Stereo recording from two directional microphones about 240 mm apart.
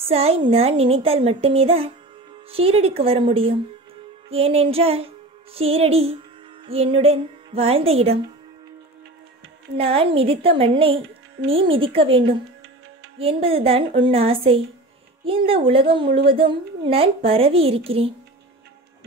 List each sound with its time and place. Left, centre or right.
0.1 s a woman's voice: right
4.3 s music: right
6.6 s a woman's voice: right
9.8 s a woman's voice: right